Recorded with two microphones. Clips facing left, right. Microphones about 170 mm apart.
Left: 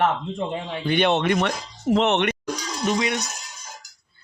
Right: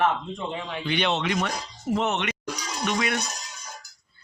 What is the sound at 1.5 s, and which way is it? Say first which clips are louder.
Speech: left 5 dB; 85° left.